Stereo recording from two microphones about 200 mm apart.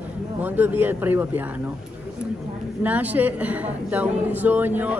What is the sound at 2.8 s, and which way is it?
A woman's voice, 10° right (ahead or behind).